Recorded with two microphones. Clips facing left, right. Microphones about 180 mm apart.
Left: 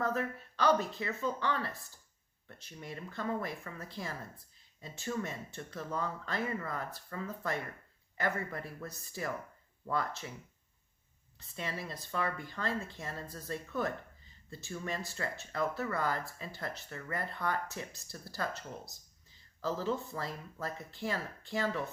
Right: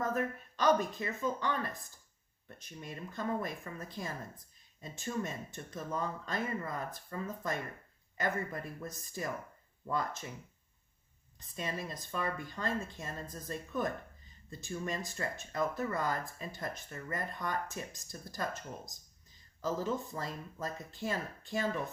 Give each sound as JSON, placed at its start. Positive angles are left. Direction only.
{"t": 0.0, "sound": "speech", "side_deg": -20}
{"t": 11.5, "sound": "speech", "side_deg": -15}